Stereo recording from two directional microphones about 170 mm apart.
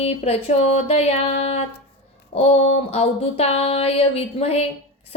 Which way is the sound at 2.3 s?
35° left (ahead or behind).